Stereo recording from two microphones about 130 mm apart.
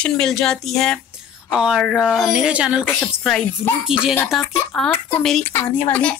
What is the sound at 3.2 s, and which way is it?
Speech, 5° left (ahead or behind).